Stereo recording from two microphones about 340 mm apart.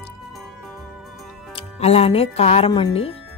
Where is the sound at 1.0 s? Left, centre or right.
Centre.